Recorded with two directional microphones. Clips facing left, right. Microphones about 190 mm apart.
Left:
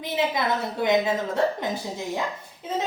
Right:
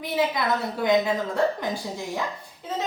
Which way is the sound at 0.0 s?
20° left (ahead or behind).